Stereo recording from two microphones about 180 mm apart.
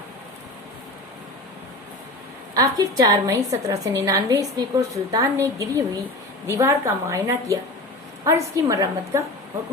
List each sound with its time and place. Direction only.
2.6 s a woman's voice: 20° right (ahead or behind)